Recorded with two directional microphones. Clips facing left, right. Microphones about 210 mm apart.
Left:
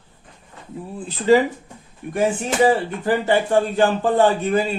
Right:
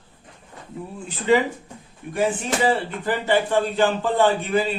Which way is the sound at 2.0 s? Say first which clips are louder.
Left 5 dB; 55° left (ahead or behind).